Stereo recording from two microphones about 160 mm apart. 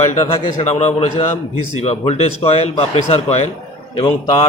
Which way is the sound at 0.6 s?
45° left (ahead or behind).